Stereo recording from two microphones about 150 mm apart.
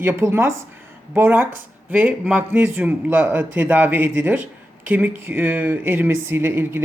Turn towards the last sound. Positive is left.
turn(degrees=-15)  # may be behind; listen again after turning